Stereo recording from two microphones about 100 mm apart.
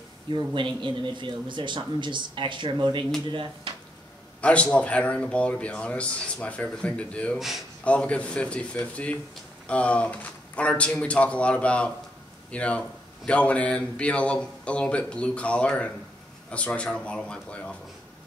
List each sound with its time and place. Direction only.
0.3 s speech: 50° right (ahead or behind)
4.4 s a man's voice: 10° left (ahead or behind)
7.3 s speech: centre (ahead or behind)
7.8 s a man's voice: 10° left (ahead or behind)